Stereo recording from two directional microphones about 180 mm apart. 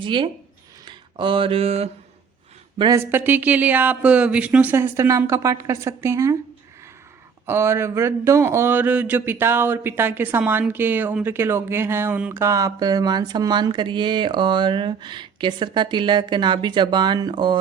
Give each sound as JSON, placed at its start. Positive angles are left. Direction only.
{"t": 0.0, "sound": "speech", "side_deg": -25}
{"t": 2.7, "sound": "speech", "side_deg": -20}
{"t": 7.4, "sound": "speech", "side_deg": -15}